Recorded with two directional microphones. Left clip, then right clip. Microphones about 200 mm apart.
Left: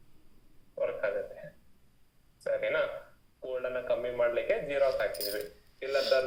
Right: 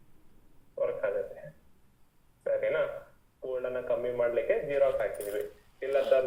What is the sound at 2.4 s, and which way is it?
Telephone, 25° left (ahead or behind).